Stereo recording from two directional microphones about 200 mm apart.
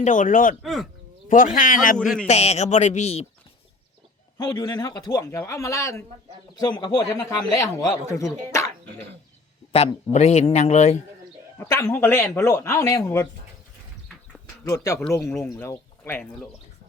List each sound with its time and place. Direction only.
0.0 s speech: 40° left (ahead or behind)
0.6 s speech: centre (ahead or behind)
1.3 s speech: 40° left (ahead or behind)
2.0 s speech: 5° left (ahead or behind)
2.2 s speech: 35° left (ahead or behind)
4.4 s speech: 20° left (ahead or behind)
9.7 s speech: 35° left (ahead or behind)
11.5 s speech: 15° left (ahead or behind)
14.6 s speech: 15° left (ahead or behind)